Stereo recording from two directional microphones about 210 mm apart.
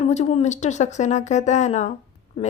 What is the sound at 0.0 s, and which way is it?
Speech, 30° left (ahead or behind).